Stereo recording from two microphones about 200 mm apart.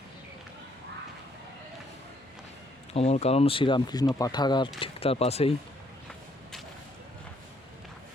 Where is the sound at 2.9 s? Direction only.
30° left (ahead or behind).